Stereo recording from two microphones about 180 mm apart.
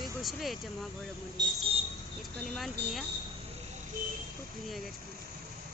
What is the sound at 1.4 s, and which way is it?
Speech, 25° right (ahead or behind).